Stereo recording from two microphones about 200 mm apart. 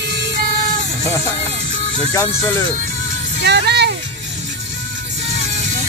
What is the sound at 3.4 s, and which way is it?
Speech, 55° right (ahead or behind).